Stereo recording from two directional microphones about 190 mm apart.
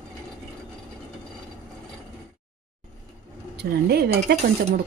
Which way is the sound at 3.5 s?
60° right (ahead or behind).